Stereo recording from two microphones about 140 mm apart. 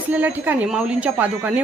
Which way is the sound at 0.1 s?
10° right (ahead or behind).